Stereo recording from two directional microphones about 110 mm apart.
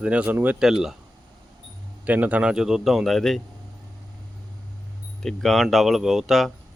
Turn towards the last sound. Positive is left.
turn(degrees=0)  # may be behind; listen again after turning